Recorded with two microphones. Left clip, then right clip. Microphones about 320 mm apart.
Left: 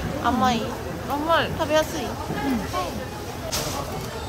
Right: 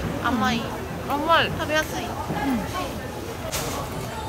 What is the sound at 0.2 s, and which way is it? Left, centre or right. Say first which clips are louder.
Speech: left 3 dB; centre.